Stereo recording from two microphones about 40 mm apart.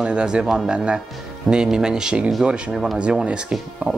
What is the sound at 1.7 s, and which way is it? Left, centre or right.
Speech, centre.